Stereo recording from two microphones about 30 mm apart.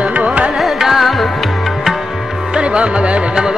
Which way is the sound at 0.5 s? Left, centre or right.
Centre.